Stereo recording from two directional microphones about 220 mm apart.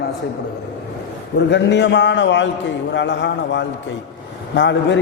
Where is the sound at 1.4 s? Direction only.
50° left (ahead or behind).